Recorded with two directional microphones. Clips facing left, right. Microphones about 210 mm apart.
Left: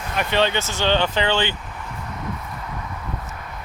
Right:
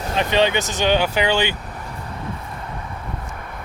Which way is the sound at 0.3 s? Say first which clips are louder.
Right 2 dB; 15° right (ahead or behind).